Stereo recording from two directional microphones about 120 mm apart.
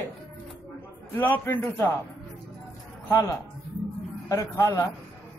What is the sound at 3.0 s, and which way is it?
A man's voice, 25° left (ahead or behind).